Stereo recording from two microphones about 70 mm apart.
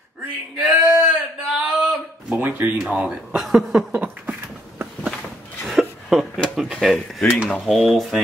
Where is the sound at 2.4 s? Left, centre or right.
Right.